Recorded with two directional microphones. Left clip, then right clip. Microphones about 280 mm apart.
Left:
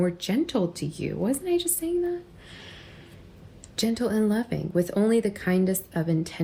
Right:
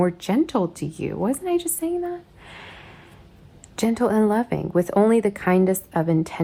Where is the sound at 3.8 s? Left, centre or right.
Right.